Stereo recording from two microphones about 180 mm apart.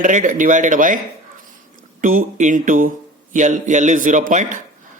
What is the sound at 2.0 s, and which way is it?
Speech, 50° right (ahead or behind).